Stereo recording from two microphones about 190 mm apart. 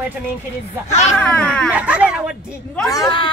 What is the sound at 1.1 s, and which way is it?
Speech, 5° left (ahead or behind).